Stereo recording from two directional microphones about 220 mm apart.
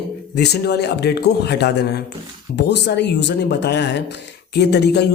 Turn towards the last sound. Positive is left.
turn(degrees=50)  # may be behind; listen again after turning